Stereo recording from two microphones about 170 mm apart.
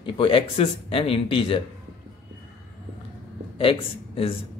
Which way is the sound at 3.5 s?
30° left (ahead or behind).